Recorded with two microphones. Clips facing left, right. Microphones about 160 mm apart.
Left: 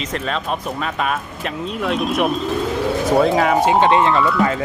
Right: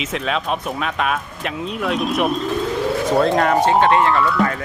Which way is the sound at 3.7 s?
15° left (ahead or behind).